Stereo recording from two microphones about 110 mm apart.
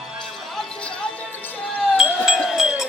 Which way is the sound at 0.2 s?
5° left (ahead or behind).